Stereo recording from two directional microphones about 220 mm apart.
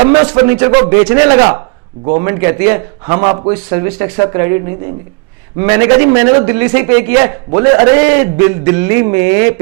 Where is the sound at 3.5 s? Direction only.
10° right (ahead or behind).